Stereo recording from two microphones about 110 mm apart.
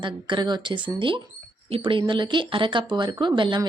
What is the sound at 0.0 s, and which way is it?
Speech, 45° right (ahead or behind).